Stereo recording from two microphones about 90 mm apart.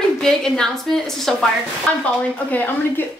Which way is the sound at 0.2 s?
5° left (ahead or behind).